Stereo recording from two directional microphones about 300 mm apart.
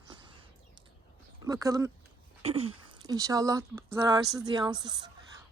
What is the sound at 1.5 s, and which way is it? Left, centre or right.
Speech, centre.